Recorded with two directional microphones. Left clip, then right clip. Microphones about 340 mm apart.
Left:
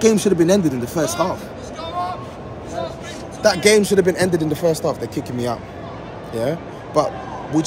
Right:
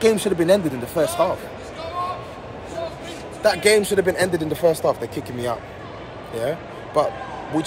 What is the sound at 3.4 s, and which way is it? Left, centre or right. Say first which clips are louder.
A man's voice: left 2 dB; centre.